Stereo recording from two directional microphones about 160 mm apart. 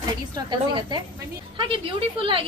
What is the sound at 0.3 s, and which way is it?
A woman's voice, 30° right (ahead or behind).